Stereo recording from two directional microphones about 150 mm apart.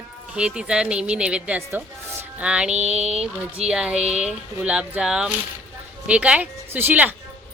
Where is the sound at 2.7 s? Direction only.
45° right (ahead or behind).